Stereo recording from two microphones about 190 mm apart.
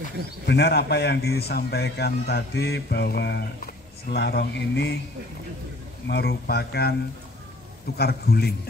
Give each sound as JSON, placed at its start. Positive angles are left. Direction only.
{"t": 0.5, "sound": "a man's voice", "side_deg": 60}
{"t": 6.0, "sound": "a man's voice", "side_deg": 60}
{"t": 8.0, "sound": "a man's voice", "side_deg": 55}